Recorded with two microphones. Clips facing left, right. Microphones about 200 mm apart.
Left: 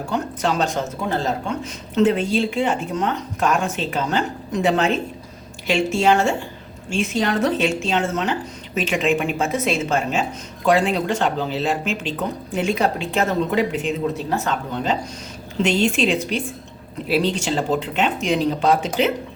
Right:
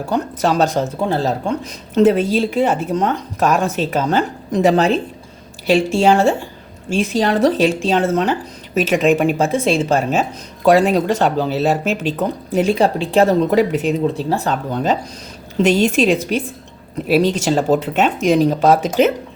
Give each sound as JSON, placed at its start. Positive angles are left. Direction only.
{"t": 0.1, "sound": "speech", "side_deg": -40}